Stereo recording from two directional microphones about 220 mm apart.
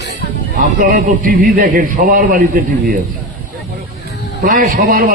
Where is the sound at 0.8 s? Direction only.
40° right (ahead or behind).